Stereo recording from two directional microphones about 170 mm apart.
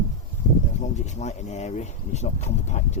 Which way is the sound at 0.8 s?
45° left (ahead or behind).